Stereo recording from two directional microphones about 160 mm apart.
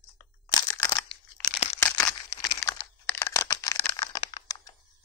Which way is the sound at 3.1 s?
20° left (ahead or behind).